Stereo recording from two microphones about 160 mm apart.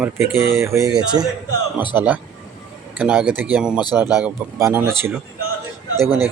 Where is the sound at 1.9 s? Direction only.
15° right (ahead or behind).